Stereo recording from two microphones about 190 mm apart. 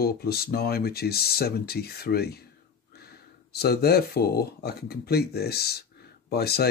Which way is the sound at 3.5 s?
55° left (ahead or behind).